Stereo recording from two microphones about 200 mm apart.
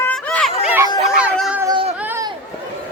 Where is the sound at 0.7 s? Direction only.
10° right (ahead or behind).